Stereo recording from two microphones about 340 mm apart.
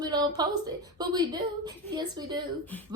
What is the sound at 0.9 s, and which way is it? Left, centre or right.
Speech, centre.